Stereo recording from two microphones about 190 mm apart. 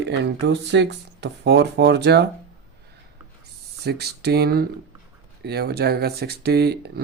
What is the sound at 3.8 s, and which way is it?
Speech, 60° right (ahead or behind).